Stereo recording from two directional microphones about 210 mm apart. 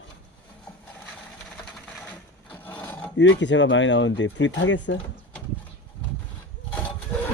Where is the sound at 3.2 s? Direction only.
60° left (ahead or behind).